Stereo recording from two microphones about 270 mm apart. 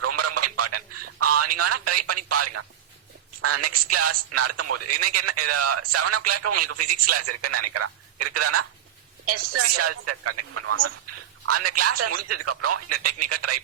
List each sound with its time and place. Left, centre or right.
0.0 s radio: right
3.4 s speech: right